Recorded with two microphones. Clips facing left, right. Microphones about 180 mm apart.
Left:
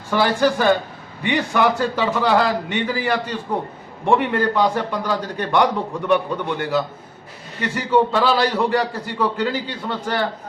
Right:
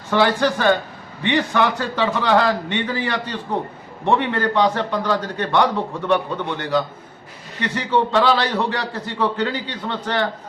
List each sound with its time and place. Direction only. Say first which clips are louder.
0.1 s a man's voice: even; 10° left (ahead or behind)